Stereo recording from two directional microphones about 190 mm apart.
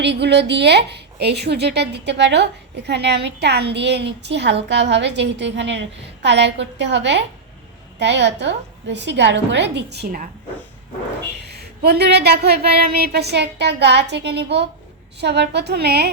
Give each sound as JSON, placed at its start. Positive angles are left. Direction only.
{"t": 0.0, "sound": "a woman's voice", "side_deg": -65}
{"t": 11.4, "sound": "a woman's voice", "side_deg": -60}